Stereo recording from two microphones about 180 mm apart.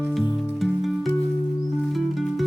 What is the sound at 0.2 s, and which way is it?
Music, centre (ahead or behind).